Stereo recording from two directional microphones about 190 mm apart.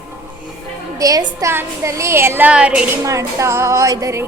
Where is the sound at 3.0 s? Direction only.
15° right (ahead or behind).